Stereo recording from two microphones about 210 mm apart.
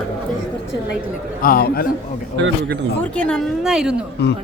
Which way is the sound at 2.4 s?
50° right (ahead or behind).